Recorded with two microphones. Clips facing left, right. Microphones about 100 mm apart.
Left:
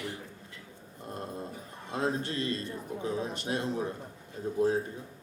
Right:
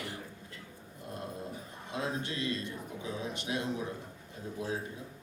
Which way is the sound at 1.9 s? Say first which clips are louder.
Left 5 dB; 40° left (ahead or behind).